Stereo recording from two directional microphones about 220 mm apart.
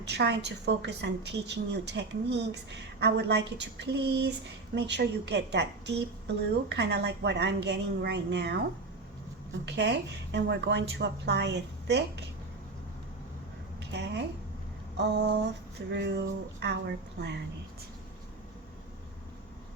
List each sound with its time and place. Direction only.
0.0 s a woman's voice: 50° right (ahead or behind)
9.6 s a woman's voice: 50° right (ahead or behind)
13.9 s a sound: 50° right (ahead or behind)
15.9 s a woman's voice: 50° right (ahead or behind)